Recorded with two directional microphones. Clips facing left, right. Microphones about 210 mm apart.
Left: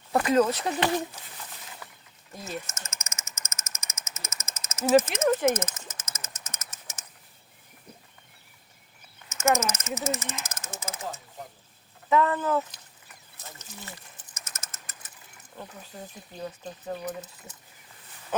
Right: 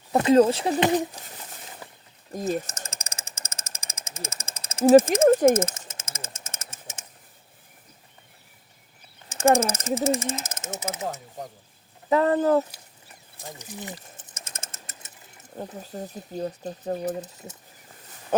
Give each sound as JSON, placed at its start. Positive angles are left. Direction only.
{"t": 0.1, "sound": "speech", "side_deg": -25}
{"t": 1.8, "sound": "a sound", "side_deg": -30}
{"t": 2.3, "sound": "a sound", "side_deg": -40}
{"t": 9.3, "sound": "speech", "side_deg": -30}
{"t": 12.0, "sound": "speech", "side_deg": -35}
{"t": 13.3, "sound": "speech", "side_deg": -15}
{"t": 13.9, "sound": "pigeon", "side_deg": -30}
{"t": 15.5, "sound": "speech", "side_deg": -35}